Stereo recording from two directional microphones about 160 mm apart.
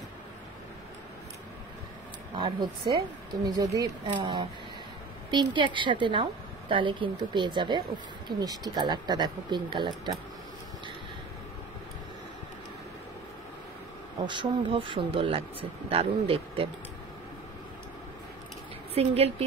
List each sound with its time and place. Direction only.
2.3 s speech: 30° right (ahead or behind)
14.2 s speech: 30° right (ahead or behind)
18.9 s speech: 40° right (ahead or behind)